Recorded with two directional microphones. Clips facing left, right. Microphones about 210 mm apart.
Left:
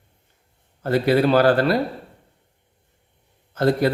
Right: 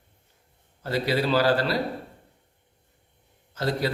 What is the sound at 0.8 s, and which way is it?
A man's voice, 55° left (ahead or behind).